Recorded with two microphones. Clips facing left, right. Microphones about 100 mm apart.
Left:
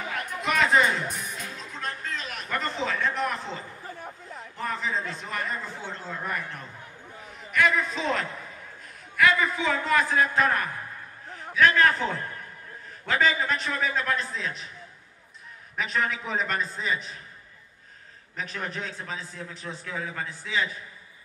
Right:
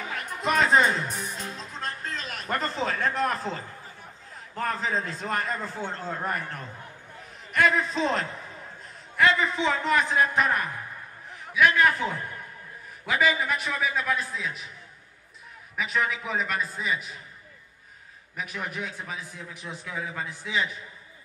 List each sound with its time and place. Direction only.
0.1 s music: 35° right (ahead or behind)
4.6 s a man's voice: 40° right (ahead or behind); by 11.9 s 15° right (ahead or behind)
13.0 s a man's voice: 10° right (ahead or behind)
15.7 s a man's voice: 5° right (ahead or behind)
18.3 s a man's voice: 10° right (ahead or behind)